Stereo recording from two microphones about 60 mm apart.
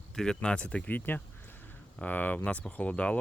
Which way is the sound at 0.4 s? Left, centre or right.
Centre.